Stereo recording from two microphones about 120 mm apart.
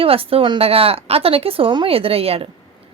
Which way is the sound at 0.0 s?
50° right (ahead or behind).